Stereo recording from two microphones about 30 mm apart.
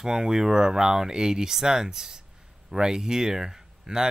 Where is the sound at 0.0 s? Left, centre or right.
Centre.